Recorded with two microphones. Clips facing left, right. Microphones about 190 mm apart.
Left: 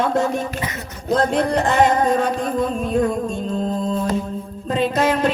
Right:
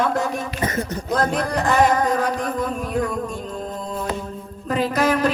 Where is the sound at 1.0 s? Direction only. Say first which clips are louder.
Left 5 dB; 25° left (ahead or behind).